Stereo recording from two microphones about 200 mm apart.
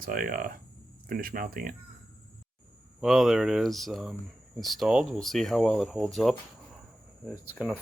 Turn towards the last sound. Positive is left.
turn(degrees=0)  # may be behind; listen again after turning